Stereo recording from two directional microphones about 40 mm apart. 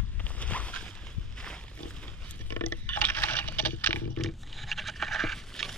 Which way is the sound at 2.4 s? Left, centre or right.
Left.